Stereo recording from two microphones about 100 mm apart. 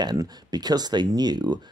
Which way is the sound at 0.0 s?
45° right (ahead or behind).